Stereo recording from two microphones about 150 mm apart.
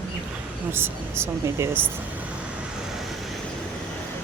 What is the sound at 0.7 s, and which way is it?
Speech, 15° right (ahead or behind).